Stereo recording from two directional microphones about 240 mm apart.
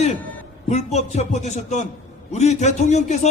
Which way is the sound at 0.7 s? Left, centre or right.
Left.